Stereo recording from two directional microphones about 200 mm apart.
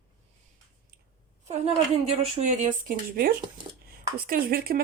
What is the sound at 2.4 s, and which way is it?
Speech, 45° right (ahead or behind).